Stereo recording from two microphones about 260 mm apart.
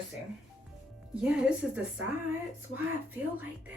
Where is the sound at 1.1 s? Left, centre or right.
Centre.